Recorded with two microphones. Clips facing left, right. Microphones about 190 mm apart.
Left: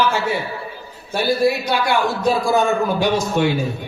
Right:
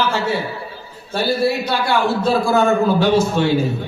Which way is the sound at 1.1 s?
15° left (ahead or behind).